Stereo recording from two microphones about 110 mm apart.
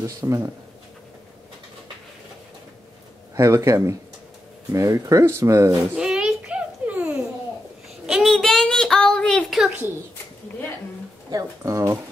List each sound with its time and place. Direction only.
0.0 s speech: 30° right (ahead or behind)
3.3 s speech: 25° right (ahead or behind)
5.9 s babbling: 5° right (ahead or behind)
8.1 s child singing: centre (ahead or behind)
11.2 s speech: 30° right (ahead or behind)